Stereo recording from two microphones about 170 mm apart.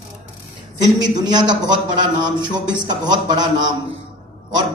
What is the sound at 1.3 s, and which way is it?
A man's voice, 25° right (ahead or behind).